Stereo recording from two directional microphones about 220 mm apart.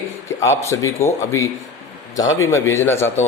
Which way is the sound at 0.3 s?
10° left (ahead or behind).